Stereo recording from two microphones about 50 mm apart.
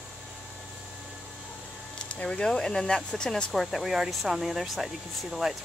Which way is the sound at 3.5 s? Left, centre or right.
Centre.